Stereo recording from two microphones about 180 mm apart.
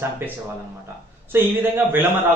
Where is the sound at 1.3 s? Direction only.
10° right (ahead or behind).